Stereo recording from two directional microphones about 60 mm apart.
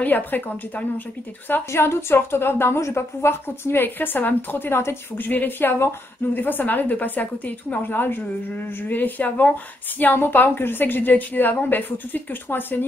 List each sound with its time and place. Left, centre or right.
0.0 s a woman's voice: left
1.7 s a woman's voice: left